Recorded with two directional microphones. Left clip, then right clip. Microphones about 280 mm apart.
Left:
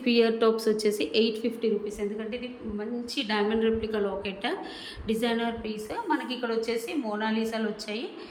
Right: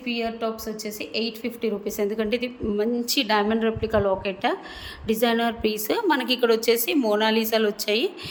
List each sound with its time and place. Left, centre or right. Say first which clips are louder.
0.0 s a woman's voice: left 4 dB; centre
2.0 s a woman's voice: right 8 dB; right